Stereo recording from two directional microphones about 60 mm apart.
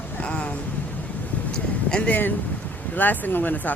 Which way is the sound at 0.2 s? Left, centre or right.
Centre.